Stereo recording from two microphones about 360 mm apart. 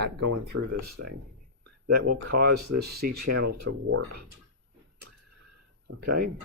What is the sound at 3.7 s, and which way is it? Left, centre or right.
Speech, right.